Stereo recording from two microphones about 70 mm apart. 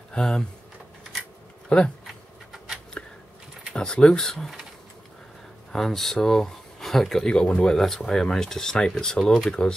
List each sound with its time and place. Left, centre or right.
0.1 s speech: centre
1.7 s speech: centre
2.0 s a sound: centre
3.7 s speech: centre
5.7 s speech: centre
7.2 s speech: centre